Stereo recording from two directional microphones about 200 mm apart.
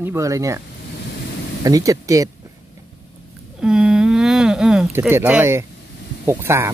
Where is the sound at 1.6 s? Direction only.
15° right (ahead or behind).